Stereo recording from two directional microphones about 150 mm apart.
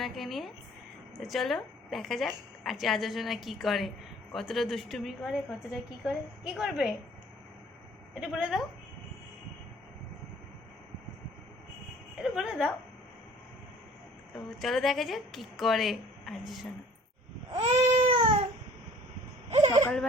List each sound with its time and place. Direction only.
0.0 s a woman's voice: centre (ahead or behind)
8.2 s a woman's voice: 5° right (ahead or behind)
12.2 s a woman's voice: 5° right (ahead or behind)
14.6 s a woman's voice: centre (ahead or behind)
17.6 s baby cry: 35° right (ahead or behind)
19.5 s a sound: 45° right (ahead or behind)